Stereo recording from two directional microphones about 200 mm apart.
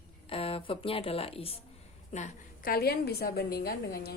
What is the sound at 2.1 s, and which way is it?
A woman's voice, 40° left (ahead or behind).